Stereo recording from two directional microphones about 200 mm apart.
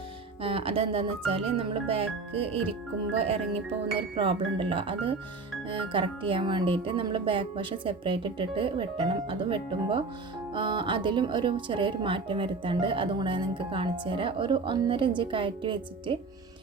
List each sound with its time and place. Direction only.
0.4 s speech: 30° right (ahead or behind)